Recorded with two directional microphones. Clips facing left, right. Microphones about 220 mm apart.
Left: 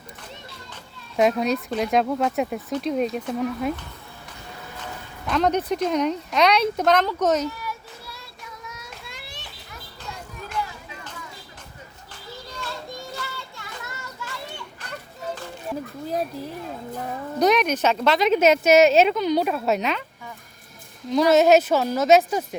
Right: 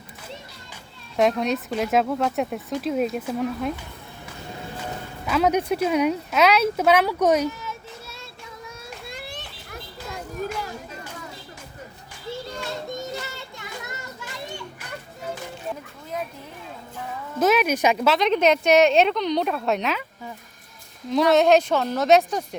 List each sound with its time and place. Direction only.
1.1 s speech: centre (ahead or behind)
5.2 s speech: 5° right (ahead or behind)
7.6 s children playing: 25° right (ahead or behind)
9.0 s children playing: 50° right (ahead or behind)
10.6 s a sound: 45° right (ahead or behind)
12.5 s children playing: 20° right (ahead or behind)
16.0 s a sound: 35° left (ahead or behind)
16.9 s a child's voice: 40° left (ahead or behind)
17.4 s speech: 5° right (ahead or behind)
18.1 s speech: 5° left (ahead or behind)
21.1 s speech: centre (ahead or behind)